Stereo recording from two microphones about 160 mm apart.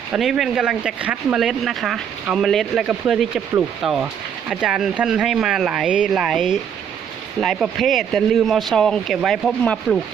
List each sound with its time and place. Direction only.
0.1 s speech: centre (ahead or behind)